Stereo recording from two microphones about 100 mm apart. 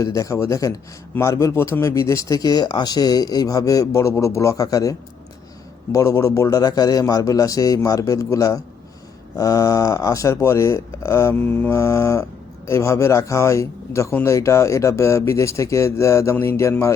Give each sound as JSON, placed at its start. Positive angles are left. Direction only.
{"t": 0.0, "sound": "speech", "side_deg": 35}